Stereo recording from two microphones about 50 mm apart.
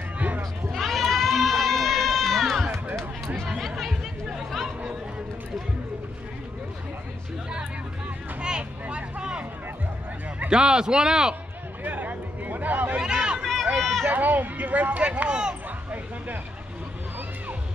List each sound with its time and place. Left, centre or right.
0.4 s run: centre
3.4 s chatter: centre
8.4 s vehicle: centre
10.5 s a man's voice: centre
11.8 s a sound: right
12.9 s a sound: centre
13.4 s run: centre
14.0 s speech: right; by 15.5 s centre